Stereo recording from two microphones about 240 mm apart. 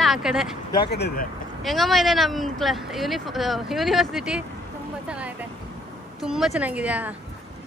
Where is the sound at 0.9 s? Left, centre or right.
Left.